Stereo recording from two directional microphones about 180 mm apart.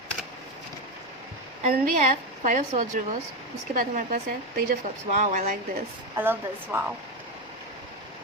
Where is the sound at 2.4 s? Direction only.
45° right (ahead or behind).